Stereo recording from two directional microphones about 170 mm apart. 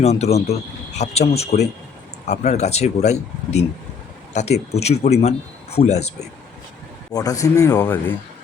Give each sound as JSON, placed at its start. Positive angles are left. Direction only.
{"t": 0.0, "sound": "speech", "side_deg": 40}
{"t": 7.1, "sound": "a man's voice", "side_deg": 20}